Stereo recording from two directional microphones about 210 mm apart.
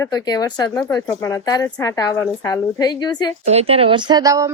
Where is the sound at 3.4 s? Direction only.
30° right (ahead or behind).